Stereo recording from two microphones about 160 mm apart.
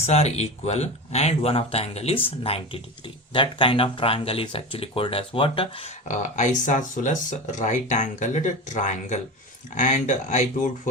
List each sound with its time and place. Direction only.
0.0 s speech: 40° left (ahead or behind)